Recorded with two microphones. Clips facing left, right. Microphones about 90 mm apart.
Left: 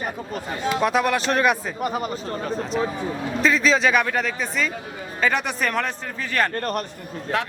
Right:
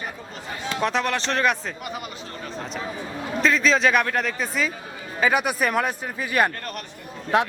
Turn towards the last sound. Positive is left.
turn(degrees=-20)  # may be behind; listen again after turning